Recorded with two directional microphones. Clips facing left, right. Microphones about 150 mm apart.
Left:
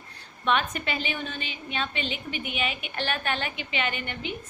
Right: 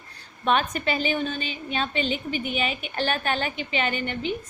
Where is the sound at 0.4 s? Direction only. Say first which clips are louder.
Right 3 dB; 35° right (ahead or behind).